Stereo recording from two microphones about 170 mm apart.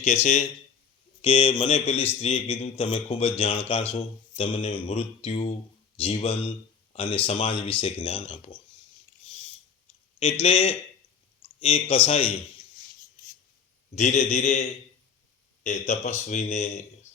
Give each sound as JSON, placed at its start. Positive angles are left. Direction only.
{"t": 0.0, "sound": "a man's voice", "side_deg": 40}
{"t": 10.4, "sound": "a man's voice", "side_deg": 40}
{"t": 13.9, "sound": "speech", "side_deg": 40}